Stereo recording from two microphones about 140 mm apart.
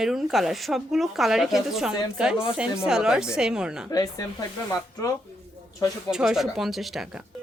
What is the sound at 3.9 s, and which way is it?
Speech, 25° left (ahead or behind).